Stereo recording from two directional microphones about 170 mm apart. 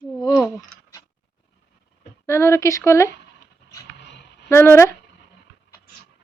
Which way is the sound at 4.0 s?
90° left.